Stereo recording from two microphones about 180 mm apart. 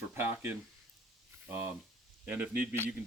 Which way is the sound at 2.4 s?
10° right (ahead or behind).